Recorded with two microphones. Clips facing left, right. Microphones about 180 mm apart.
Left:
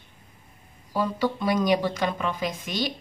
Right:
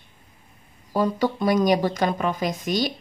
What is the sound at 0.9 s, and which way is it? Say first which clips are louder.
A woman's voice: right 3 dB; 45° right (ahead or behind).